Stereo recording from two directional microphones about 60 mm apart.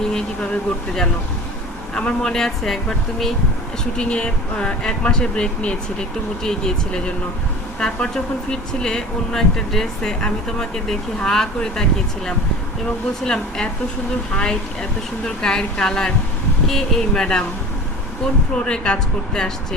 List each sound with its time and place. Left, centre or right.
0.0 s vehicle: centre
2.0 s speech: centre
3.9 s speech: centre
18.5 s speech: centre